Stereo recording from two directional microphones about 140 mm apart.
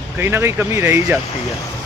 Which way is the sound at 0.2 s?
15° right (ahead or behind).